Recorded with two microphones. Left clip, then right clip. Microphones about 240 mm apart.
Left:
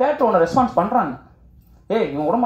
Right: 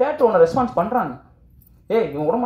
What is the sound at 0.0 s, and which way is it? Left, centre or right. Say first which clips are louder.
A man's voice: right 1 dB; right.